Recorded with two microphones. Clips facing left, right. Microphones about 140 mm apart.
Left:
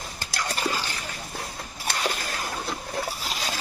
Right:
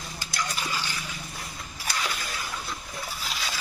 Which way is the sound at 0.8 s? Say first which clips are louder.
Left 1 dB; 35° left (ahead or behind).